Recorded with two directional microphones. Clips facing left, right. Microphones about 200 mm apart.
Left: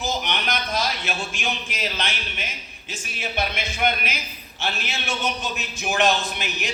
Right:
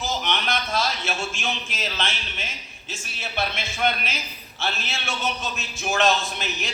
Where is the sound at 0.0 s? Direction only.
15° left (ahead or behind).